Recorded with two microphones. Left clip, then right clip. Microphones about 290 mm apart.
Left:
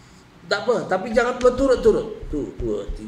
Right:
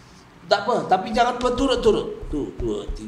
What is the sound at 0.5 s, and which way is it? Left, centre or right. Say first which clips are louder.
A man's voice: right 2 dB; right.